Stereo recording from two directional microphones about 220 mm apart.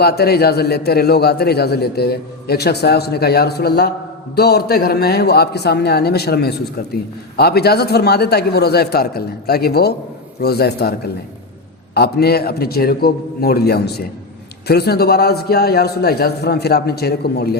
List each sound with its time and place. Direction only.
0.0 s a man's voice: 45° left (ahead or behind)
11.9 s a man's voice: 45° left (ahead or behind)